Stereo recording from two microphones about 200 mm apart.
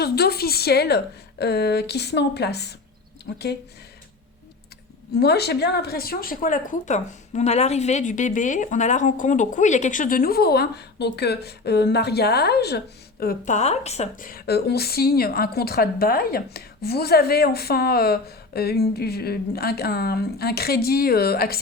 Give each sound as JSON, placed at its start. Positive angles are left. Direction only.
{"t": 0.0, "sound": "a woman's voice", "side_deg": 50}
{"t": 5.1, "sound": "speech", "side_deg": 55}